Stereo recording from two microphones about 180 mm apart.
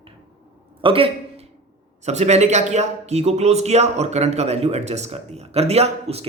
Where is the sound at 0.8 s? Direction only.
30° right (ahead or behind).